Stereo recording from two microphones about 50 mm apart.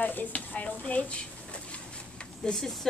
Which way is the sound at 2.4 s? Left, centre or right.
Centre.